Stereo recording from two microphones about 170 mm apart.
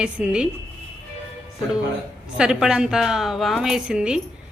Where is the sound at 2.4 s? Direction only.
5° right (ahead or behind).